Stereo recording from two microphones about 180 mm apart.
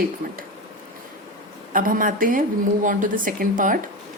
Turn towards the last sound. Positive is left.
turn(degrees=-50)  # may be behind; listen again after turning